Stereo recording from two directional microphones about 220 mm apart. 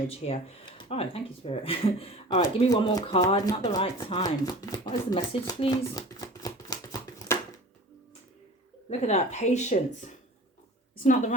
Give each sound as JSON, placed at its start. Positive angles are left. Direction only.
{"t": 0.1, "sound": "speech", "side_deg": 25}
{"t": 8.9, "sound": "a woman's voice", "side_deg": 30}